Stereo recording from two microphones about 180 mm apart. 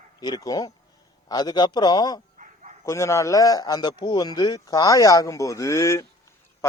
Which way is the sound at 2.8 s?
15° left (ahead or behind).